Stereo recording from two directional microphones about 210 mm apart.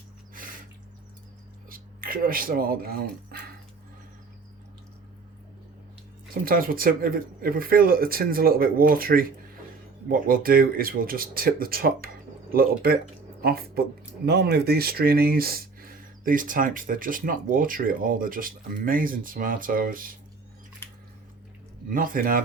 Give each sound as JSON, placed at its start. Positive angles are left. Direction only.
{"t": 1.7, "sound": "speech", "side_deg": -45}
{"t": 3.3, "sound": "dog", "side_deg": -45}
{"t": 6.4, "sound": "speech", "side_deg": -45}
{"t": 21.8, "sound": "speech", "side_deg": -40}